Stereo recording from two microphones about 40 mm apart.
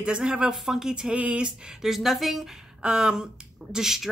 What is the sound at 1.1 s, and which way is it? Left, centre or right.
Speech, right.